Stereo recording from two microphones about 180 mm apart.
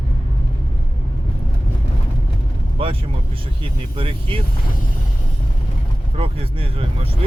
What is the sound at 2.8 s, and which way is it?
Speech, 30° right (ahead or behind).